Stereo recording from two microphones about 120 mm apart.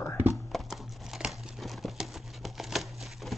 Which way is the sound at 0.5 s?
Centre (ahead or behind).